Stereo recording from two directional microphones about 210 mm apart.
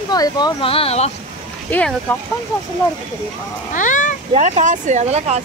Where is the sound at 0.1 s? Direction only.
20° left (ahead or behind).